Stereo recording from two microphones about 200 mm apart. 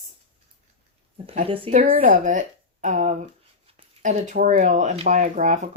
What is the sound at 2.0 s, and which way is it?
Speech, 40° right (ahead or behind).